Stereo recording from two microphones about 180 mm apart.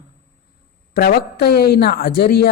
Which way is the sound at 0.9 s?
55° left (ahead or behind).